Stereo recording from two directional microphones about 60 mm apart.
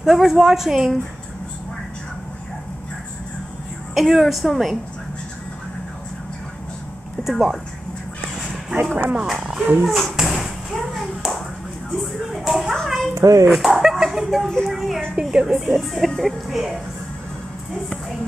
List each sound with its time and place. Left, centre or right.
0.0 s a woman's voice: centre
3.9 s a woman's voice: centre
7.2 s a woman's voice: centre
9.1 s speech: centre
9.8 s a woman's voice: centre
10.1 s tap: centre
12.0 s music: centre
12.8 s children playing: centre
13.1 s a child's voice: right
13.5 s a sound: centre
15.1 s a woman's voice: centre